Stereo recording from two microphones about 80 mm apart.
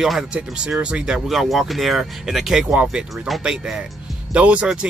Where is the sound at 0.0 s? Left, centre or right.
Centre.